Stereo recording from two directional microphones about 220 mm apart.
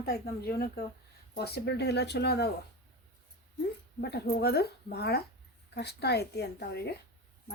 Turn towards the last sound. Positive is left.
turn(degrees=50)  # may be behind; listen again after turning